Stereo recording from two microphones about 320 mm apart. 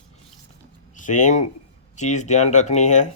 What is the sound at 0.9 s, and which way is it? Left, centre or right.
Speech, left.